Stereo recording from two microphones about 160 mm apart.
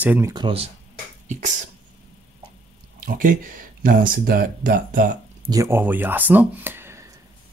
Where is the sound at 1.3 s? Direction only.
50° right (ahead or behind).